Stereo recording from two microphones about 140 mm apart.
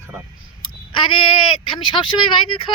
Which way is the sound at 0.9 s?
40° left (ahead or behind).